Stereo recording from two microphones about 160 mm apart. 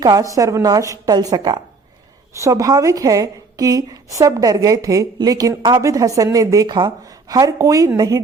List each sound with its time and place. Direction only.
0.0 s a woman's voice: 25° right (ahead or behind)